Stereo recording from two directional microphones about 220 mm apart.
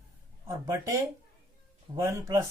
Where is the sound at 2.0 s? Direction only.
15° right (ahead or behind).